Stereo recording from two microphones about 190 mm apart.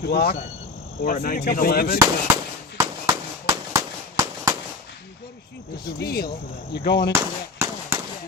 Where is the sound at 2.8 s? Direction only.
15° right (ahead or behind).